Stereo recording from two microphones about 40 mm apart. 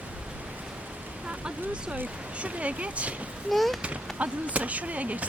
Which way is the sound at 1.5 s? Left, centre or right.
Right.